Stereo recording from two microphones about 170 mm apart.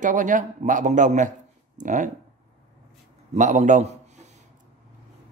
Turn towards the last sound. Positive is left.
turn(degrees=-45)  # may be behind; listen again after turning